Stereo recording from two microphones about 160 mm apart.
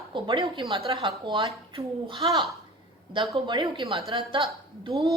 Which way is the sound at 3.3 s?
30° right (ahead or behind).